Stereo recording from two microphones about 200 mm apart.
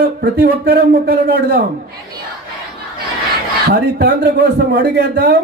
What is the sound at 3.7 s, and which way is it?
Speech, 55° right (ahead or behind).